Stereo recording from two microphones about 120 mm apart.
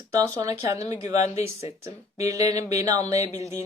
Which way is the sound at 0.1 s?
30° right (ahead or behind).